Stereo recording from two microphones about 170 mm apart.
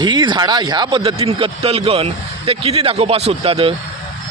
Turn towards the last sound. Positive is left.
turn(degrees=-35)  # may be behind; listen again after turning